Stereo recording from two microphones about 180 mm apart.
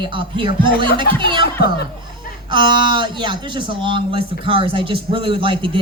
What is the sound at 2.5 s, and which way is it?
Speech, 25° right (ahead or behind).